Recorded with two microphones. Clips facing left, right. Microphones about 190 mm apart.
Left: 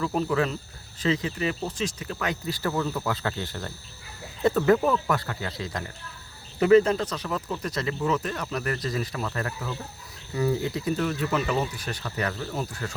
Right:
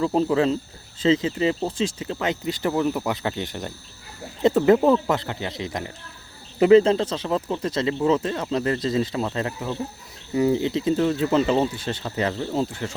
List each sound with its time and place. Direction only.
0.0 s speech: 30° right (ahead or behind)